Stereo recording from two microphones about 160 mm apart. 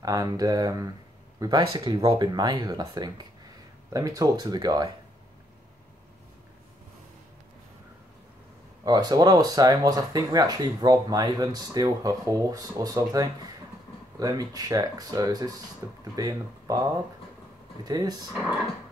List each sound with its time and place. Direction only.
0.0 s speech: 20° right (ahead or behind)
8.8 s speech: 25° right (ahead or behind)
17.8 s speech: 25° right (ahead or behind)
18.3 s speech: centre (ahead or behind)